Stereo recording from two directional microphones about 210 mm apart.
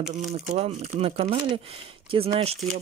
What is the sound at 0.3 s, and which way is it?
Speech, 30° right (ahead or behind).